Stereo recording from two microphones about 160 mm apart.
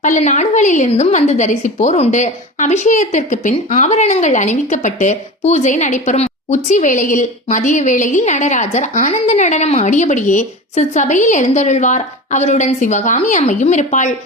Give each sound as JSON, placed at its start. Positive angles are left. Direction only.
{"t": 0.0, "sound": "a woman's voice", "side_deg": 50}